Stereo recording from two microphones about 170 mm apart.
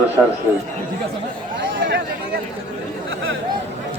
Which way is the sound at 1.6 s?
90° right.